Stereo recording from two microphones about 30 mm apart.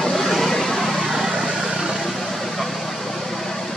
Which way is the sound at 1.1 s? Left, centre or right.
Centre.